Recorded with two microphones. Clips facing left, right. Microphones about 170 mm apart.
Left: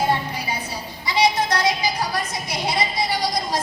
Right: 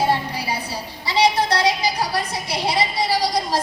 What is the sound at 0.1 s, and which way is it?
Music, 35° right (ahead or behind).